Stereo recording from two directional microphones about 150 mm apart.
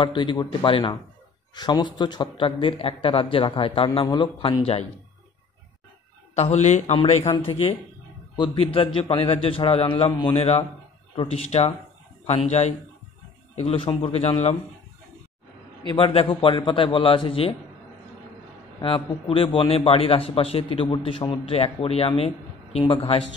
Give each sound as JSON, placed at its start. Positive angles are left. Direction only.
{"t": 0.0, "sound": "a man's voice", "side_deg": 35}
{"t": 6.3, "sound": "speech", "side_deg": 45}
{"t": 7.3, "sound": "a man's voice", "side_deg": 35}
{"t": 15.9, "sound": "a man's voice", "side_deg": 40}
{"t": 18.8, "sound": "a man's voice", "side_deg": 35}